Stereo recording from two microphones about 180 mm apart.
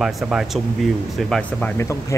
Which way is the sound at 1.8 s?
15° left (ahead or behind).